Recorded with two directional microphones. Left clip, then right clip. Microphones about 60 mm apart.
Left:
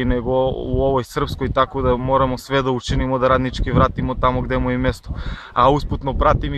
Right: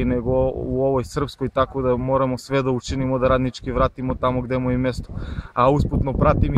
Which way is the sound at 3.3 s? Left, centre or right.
Centre.